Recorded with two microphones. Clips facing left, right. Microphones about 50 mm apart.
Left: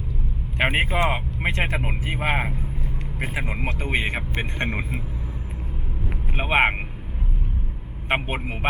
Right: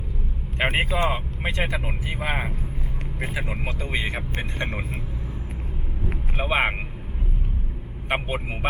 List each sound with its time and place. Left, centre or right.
0.6 s speech: left
6.3 s speech: left
8.1 s speech: left